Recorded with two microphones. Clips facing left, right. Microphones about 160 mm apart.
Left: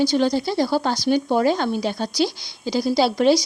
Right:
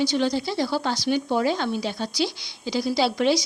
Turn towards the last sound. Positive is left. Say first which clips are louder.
# left 4 dB
turn(degrees=40)  # may be behind; listen again after turning